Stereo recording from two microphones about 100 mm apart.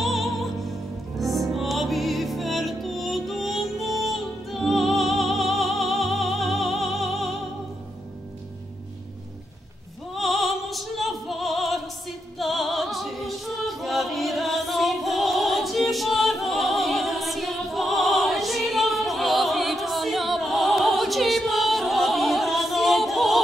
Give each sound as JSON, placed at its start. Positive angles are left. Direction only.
{"t": 0.0, "sound": "music", "side_deg": 0}
{"t": 10.1, "sound": "opera", "side_deg": 0}
{"t": 12.4, "sound": "music", "side_deg": 0}